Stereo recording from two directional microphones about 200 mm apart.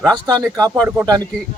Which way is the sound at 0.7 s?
10° right (ahead or behind).